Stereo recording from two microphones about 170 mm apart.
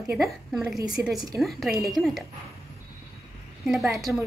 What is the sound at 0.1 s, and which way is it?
A woman's voice, centre (ahead or behind).